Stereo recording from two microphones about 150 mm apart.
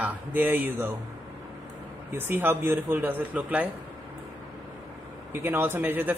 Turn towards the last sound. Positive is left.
turn(degrees=-10)  # may be behind; listen again after turning